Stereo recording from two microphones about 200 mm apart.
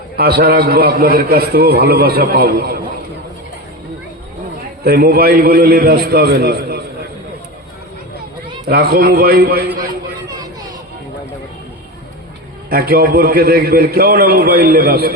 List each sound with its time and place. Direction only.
0.2 s a man's voice: 50° right (ahead or behind)
4.8 s a man's voice: 50° right (ahead or behind)
8.6 s a man's voice: 50° right (ahead or behind)
12.7 s a man's voice: 50° right (ahead or behind)